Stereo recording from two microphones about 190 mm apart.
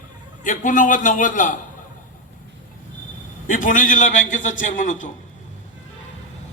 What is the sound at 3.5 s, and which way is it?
A man's voice, 40° left (ahead or behind).